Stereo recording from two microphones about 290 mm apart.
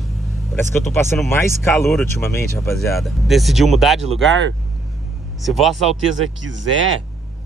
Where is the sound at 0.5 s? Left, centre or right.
Centre.